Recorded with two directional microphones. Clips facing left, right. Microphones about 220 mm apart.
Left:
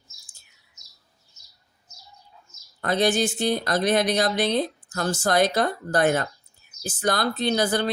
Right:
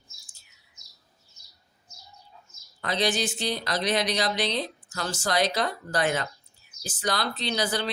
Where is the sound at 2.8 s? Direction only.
50° left (ahead or behind).